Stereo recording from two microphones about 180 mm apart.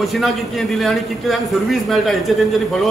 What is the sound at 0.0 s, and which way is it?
A man's voice, centre (ahead or behind).